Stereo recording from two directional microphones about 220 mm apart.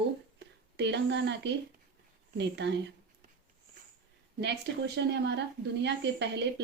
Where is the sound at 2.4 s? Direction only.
50° right (ahead or behind).